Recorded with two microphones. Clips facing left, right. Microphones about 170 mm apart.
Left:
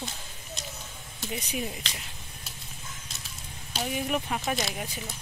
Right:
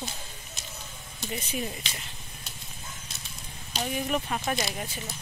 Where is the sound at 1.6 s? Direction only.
5° left (ahead or behind).